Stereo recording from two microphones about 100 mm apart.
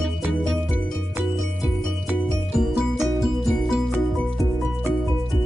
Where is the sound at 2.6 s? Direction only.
5° right (ahead or behind).